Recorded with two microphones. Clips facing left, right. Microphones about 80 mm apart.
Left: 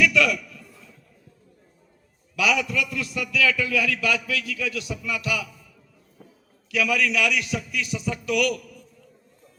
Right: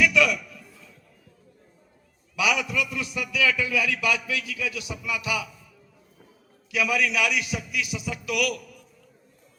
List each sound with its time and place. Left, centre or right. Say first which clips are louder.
0.0 s a sound: left 1 dB; centre
2.3 s a man's voice: left 2 dB; centre
6.7 s a man's voice: left 1 dB; centre